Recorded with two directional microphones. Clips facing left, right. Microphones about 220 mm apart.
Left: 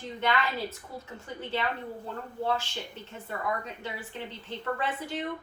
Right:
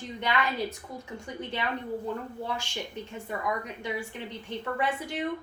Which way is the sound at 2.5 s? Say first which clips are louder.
Left 3 dB; 15° right (ahead or behind).